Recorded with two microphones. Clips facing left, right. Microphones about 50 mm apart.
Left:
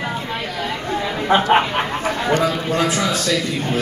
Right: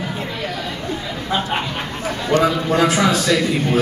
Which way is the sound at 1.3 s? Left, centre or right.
Left.